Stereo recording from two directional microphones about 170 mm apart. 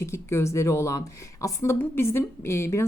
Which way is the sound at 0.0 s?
15° left (ahead or behind).